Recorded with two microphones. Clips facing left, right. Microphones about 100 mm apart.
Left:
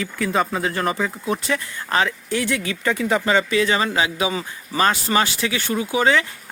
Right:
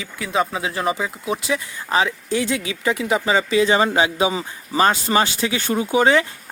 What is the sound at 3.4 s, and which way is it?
Speech, 25° right (ahead or behind).